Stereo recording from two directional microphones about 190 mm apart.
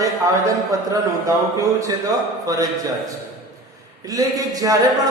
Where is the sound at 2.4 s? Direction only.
20° right (ahead or behind).